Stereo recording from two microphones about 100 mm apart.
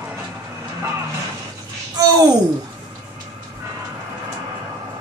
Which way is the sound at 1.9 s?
40° right (ahead or behind).